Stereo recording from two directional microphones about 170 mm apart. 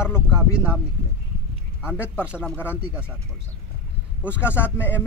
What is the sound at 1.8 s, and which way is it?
Speech, 10° right (ahead or behind).